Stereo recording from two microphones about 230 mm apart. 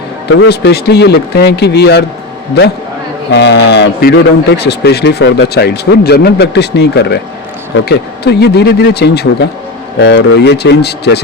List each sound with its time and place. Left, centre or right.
0.3 s a man's voice: left
3.3 s a man's voice: left